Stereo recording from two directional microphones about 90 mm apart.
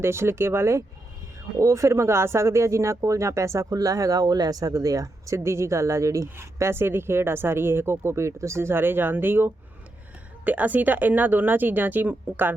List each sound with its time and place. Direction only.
0.0 s speech: 30° right (ahead or behind)